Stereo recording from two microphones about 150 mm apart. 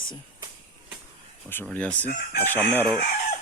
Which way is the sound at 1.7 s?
10° left (ahead or behind).